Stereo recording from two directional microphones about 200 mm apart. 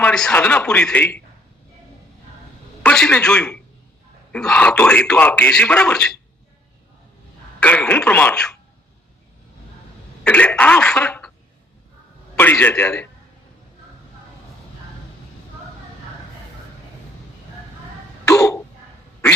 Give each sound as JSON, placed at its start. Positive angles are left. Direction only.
{"t": 0.0, "sound": "a man's voice", "side_deg": 5}
{"t": 2.8, "sound": "a man's voice", "side_deg": 5}
{"t": 7.6, "sound": "speech", "side_deg": 5}
{"t": 10.2, "sound": "a man's voice", "side_deg": 5}
{"t": 12.4, "sound": "speech", "side_deg": 10}
{"t": 18.3, "sound": "throat clearing", "side_deg": 15}